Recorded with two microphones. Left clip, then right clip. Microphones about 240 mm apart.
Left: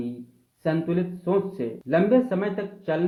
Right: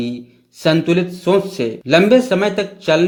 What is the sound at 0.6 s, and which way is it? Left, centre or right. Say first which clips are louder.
Speech: right 11 dB; right.